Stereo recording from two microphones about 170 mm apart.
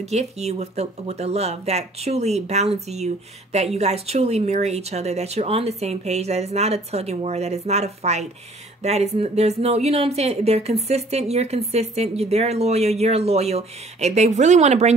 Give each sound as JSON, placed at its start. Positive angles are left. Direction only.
{"t": 0.0, "sound": "a woman's voice", "side_deg": -40}